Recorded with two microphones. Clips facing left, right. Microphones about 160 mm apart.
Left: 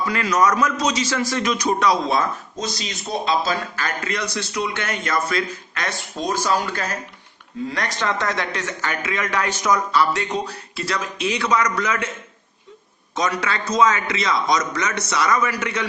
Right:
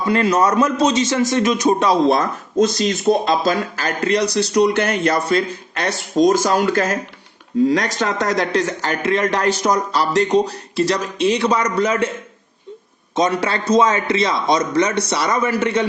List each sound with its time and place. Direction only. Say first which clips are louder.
0.0 s a man's voice: right 4 dB; 30° right (ahead or behind)
2.0 s speech: right 5 dB; 50° right (ahead or behind); by 6.0 s 35° right (ahead or behind)
6.0 s speech: right 16 dB; 90° right
6.3 s speech: right 6 dB; 45° right (ahead or behind); by 12.1 s 30° right (ahead or behind)
13.1 s a man's voice: right 5 dB; 30° right (ahead or behind)